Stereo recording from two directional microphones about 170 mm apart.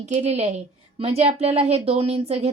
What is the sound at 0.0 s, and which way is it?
A woman's voice, 40° right (ahead or behind).